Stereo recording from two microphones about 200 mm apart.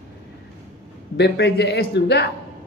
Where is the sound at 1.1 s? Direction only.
55° left (ahead or behind).